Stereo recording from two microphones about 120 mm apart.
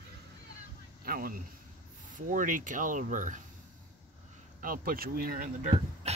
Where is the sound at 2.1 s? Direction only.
90° right.